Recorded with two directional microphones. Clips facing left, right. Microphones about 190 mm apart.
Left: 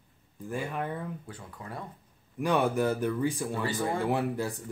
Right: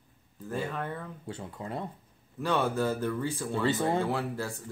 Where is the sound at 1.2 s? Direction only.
25° right (ahead or behind).